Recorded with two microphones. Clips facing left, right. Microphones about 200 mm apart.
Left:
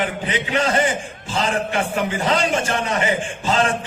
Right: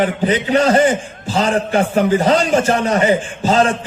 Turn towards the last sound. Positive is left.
turn(degrees=-40)  # may be behind; listen again after turning